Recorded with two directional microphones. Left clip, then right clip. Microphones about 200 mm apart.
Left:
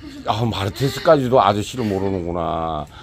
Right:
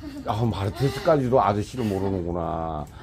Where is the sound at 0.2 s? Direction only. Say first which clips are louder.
Left 6 dB; 25° left (ahead or behind).